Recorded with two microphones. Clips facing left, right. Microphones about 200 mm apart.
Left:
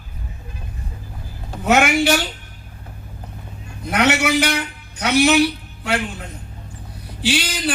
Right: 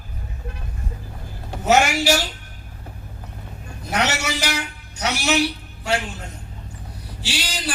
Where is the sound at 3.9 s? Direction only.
60° left (ahead or behind).